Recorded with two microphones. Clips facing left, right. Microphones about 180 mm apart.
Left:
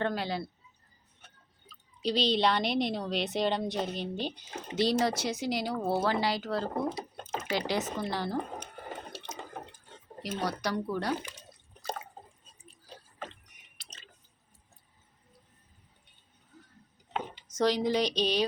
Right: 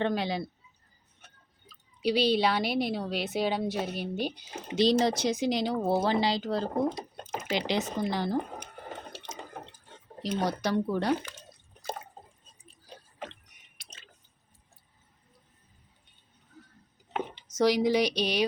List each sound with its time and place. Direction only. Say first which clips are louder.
0.0 s speech: right 3 dB; 20° right (ahead or behind)
2.0 s speech: right 3 dB; 10° right (ahead or behind)
7.9 s speech: right 3 dB; 15° right (ahead or behind)
10.2 s speech: right 4 dB; 20° right (ahead or behind)
17.2 s chopping: right 3 dB; 10° right (ahead or behind)